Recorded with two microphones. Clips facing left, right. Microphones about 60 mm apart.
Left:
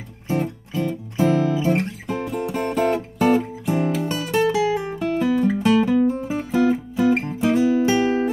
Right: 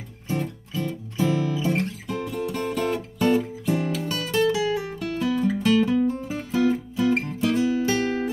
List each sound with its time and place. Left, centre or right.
0.3 s music: left